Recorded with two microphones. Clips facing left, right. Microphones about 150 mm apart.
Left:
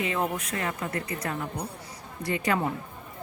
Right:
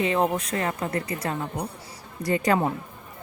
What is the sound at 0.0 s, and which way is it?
Speech, 30° right (ahead or behind).